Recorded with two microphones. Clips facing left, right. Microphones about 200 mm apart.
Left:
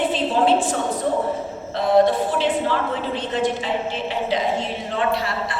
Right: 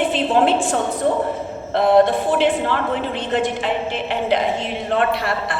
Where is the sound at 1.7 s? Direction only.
65° right (ahead or behind).